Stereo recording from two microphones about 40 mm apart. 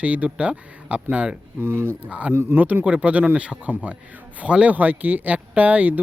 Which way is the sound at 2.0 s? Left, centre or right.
Right.